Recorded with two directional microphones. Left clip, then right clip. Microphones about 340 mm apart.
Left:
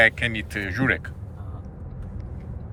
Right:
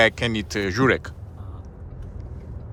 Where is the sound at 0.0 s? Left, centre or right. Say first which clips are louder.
Even; centre.